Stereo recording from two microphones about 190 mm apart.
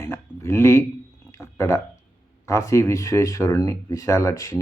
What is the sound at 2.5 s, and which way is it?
Speech, 15° left (ahead or behind).